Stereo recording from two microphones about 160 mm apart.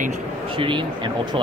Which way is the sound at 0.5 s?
30° right (ahead or behind).